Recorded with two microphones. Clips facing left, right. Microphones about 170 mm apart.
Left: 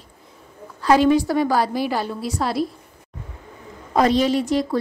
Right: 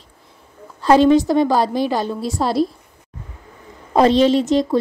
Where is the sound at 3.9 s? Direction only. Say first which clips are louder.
Right 4 dB; 25° right (ahead or behind).